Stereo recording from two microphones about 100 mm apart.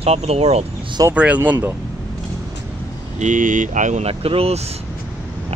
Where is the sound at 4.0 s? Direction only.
80° right.